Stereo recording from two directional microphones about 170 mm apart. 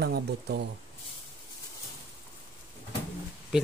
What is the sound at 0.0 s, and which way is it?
Speech, 70° right (ahead or behind).